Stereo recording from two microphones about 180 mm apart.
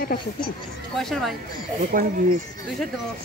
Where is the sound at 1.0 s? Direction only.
Centre (ahead or behind).